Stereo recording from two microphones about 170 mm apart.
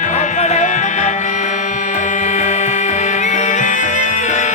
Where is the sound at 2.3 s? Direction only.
45° left (ahead or behind).